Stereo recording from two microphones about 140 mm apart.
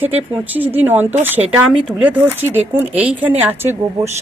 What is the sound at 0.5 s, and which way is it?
Speech, 10° right (ahead or behind).